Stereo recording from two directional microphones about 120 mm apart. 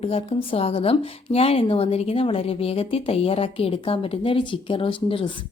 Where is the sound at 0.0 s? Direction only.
55° left (ahead or behind).